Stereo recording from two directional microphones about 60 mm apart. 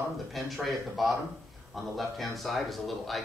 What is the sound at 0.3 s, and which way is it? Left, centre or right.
Speech, centre.